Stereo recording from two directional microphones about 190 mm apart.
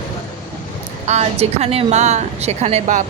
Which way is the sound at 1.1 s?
35° right (ahead or behind).